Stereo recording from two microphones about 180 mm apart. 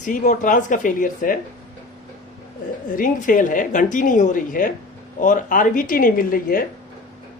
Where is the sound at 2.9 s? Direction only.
50° left (ahead or behind).